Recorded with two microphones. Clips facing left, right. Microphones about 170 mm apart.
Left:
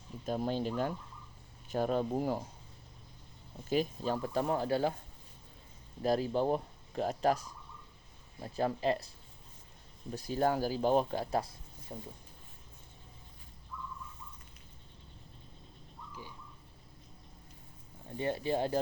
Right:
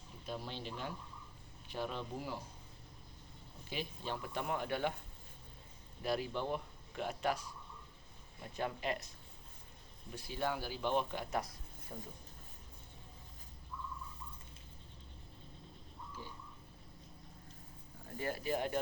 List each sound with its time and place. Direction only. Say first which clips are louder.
0.3 s speech: left 10 dB; 45° left (ahead or behind)
3.7 s speech: left 10 dB; 40° left (ahead or behind)
6.0 s speech: left 7 dB; 40° left (ahead or behind)
18.2 s speech: left 5 dB; 25° left (ahead or behind)